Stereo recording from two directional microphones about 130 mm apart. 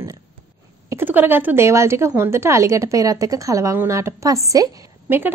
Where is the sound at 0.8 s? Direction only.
15° right (ahead or behind).